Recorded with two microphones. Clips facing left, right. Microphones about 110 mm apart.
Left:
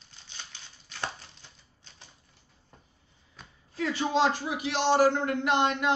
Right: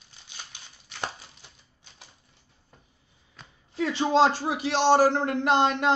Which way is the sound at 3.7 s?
25° right (ahead or behind).